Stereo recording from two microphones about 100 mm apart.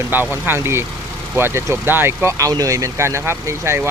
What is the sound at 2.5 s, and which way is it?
Speech, 40° right (ahead or behind).